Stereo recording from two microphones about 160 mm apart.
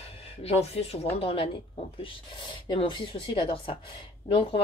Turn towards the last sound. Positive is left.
turn(degrees=35)  # may be behind; listen again after turning